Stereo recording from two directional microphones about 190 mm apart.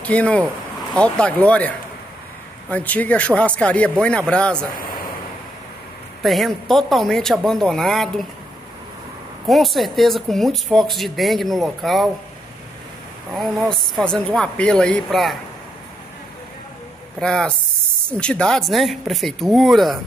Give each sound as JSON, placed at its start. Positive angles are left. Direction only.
{"t": 0.0, "sound": "speech", "side_deg": 5}
{"t": 2.7, "sound": "speech", "side_deg": 10}
{"t": 4.7, "sound": "speech", "side_deg": 50}
{"t": 6.2, "sound": "speech", "side_deg": 0}
{"t": 9.5, "sound": "speech", "side_deg": 0}
{"t": 13.3, "sound": "speech", "side_deg": 0}
{"t": 17.2, "sound": "speech", "side_deg": 5}